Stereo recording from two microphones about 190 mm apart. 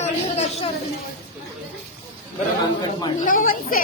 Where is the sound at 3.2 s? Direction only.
45° left (ahead or behind).